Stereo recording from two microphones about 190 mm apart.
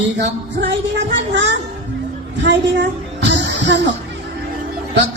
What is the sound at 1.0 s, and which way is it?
Speech, 70° right (ahead or behind).